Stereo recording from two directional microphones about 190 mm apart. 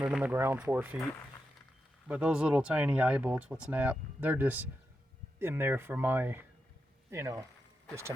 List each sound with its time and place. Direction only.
0.0 s speech: 5° right (ahead or behind)
2.0 s speech: 5° right (ahead or behind)